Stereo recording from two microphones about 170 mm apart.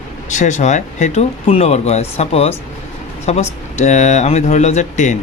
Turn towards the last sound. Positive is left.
turn(degrees=45)  # may be behind; listen again after turning